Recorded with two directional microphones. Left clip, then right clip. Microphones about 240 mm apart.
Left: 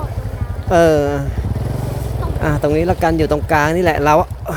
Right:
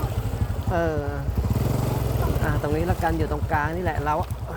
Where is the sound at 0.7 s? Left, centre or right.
Left.